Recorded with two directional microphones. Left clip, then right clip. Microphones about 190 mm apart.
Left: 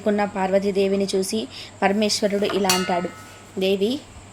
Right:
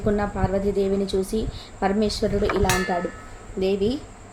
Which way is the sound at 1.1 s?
20° right (ahead or behind).